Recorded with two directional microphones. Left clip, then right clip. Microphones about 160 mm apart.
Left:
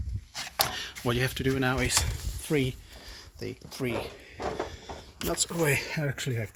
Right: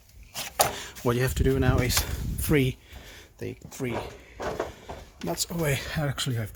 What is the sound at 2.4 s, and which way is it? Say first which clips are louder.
Speech: right 4 dB; 30° right (ahead or behind).